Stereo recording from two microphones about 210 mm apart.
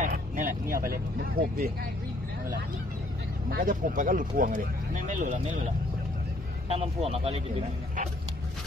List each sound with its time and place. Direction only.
0.0 s speech: 40° right (ahead or behind)
3.4 s speech: 40° right (ahead or behind)
6.7 s speech: 30° right (ahead or behind)